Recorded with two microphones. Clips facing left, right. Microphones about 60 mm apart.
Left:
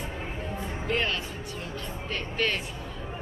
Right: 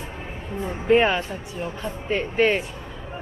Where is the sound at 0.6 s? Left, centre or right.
Centre.